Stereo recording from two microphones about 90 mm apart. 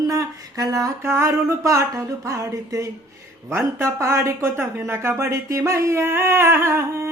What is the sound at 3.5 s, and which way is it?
Speech, 25° right (ahead or behind).